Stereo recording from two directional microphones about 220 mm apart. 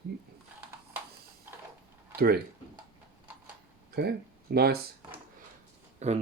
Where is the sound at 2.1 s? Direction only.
45° right (ahead or behind).